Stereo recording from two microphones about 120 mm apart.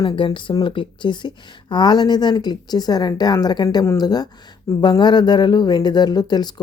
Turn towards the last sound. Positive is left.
turn(degrees=35)  # may be behind; listen again after turning